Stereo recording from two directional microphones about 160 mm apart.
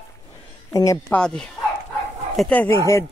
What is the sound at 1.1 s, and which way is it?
Speech, 5° left (ahead or behind).